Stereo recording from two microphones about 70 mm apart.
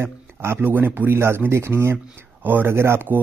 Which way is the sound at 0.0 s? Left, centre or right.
Right.